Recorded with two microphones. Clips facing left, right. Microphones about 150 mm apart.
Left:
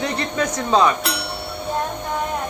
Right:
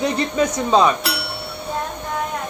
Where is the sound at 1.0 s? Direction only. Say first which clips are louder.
Even; centre (ahead or behind).